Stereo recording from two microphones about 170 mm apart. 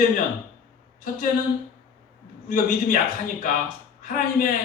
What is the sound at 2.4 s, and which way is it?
Speech, 55° left (ahead or behind).